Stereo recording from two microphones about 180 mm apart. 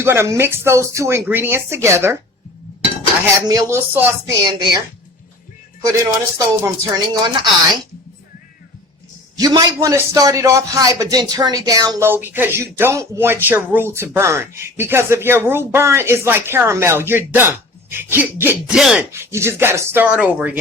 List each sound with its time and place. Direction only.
0.0 s a man's voice: 15° right (ahead or behind)
3.5 s a man's voice: 15° right (ahead or behind)
4.4 s speech: 25° right (ahead or behind)
5.9 s speech: 15° right (ahead or behind)
9.4 s a man's voice: 20° right (ahead or behind); by 19.0 s centre (ahead or behind)
19.1 s a man's voice: 15° right (ahead or behind)